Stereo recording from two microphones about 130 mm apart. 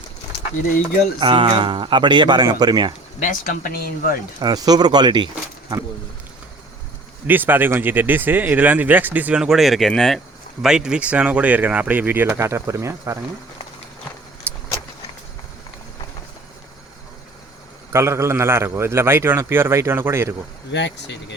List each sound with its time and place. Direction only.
1.2 s speech: 40° right (ahead or behind)
3.2 s speech: 85° left
4.4 s speech: 30° right (ahead or behind)
7.3 s speech: 15° right (ahead or behind)
14.5 s vehicle: 20° right (ahead or behind)
17.9 s a man's voice: 20° right (ahead or behind)